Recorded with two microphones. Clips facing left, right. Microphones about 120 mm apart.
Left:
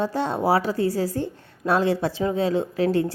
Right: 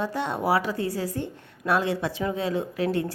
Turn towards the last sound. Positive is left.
turn(degrees=30)  # may be behind; listen again after turning